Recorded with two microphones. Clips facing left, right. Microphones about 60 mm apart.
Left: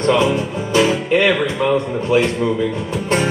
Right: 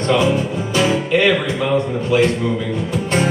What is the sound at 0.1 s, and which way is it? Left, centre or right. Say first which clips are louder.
Music: right 1 dB; centre.